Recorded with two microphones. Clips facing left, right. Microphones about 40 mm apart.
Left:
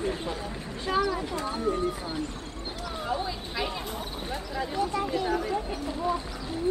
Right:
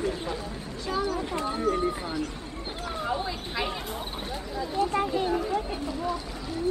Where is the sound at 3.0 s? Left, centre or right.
Centre.